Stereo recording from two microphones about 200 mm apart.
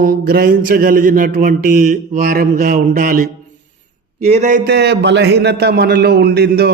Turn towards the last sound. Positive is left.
turn(degrees=-55)  # may be behind; listen again after turning